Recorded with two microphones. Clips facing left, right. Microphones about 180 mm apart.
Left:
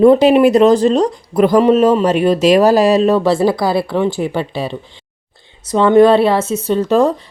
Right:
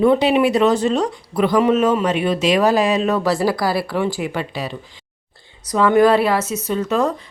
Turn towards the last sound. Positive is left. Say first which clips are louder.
# left 6 dB
turn(degrees=30)  # may be behind; listen again after turning